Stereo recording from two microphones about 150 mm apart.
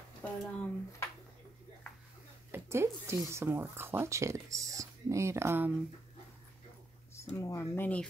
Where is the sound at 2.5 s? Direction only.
15° right (ahead or behind).